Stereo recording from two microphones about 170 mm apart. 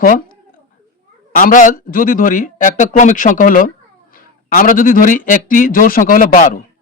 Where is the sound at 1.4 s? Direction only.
50° left (ahead or behind).